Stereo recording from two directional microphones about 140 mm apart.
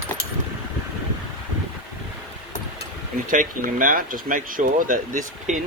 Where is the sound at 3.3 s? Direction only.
75° right (ahead or behind).